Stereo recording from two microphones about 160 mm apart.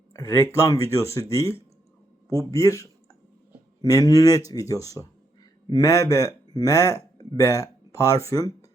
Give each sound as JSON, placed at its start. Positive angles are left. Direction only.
{"t": 0.1, "sound": "speech", "side_deg": 15}